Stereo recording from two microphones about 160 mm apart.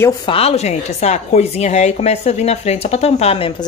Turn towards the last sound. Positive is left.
turn(degrees=40)  # may be behind; listen again after turning